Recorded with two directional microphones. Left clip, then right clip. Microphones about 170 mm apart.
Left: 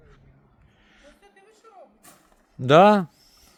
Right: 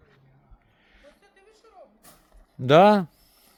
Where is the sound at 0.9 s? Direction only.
5° left (ahead or behind).